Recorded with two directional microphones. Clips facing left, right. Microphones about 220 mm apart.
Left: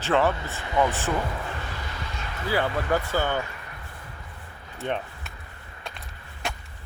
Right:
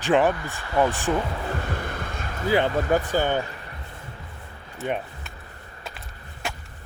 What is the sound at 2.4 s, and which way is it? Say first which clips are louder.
Speech: right 4 dB; 20° right (ahead or behind).